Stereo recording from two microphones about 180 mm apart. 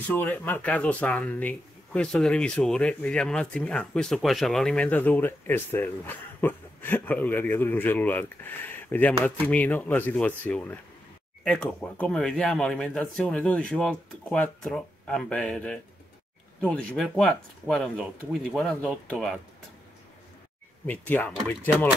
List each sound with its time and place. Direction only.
0.1 s speech: 10° left (ahead or behind)
20.8 s speech: 10° left (ahead or behind)